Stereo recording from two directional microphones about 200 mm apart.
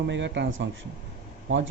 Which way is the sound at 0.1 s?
65° right (ahead or behind).